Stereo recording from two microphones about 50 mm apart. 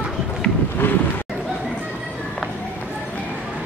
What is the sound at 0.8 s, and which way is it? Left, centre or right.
Speech, left.